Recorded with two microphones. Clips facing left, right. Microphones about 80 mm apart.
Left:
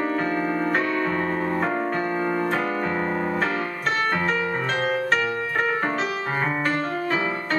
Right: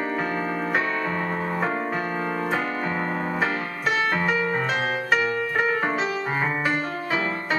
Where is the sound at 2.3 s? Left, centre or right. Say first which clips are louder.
Left 2 dB; centre.